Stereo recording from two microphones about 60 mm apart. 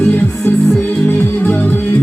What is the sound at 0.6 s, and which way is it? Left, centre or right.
Music, centre.